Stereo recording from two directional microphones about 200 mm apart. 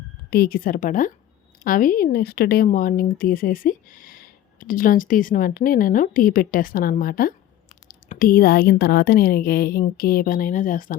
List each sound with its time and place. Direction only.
0.3 s speech: 50° left (ahead or behind)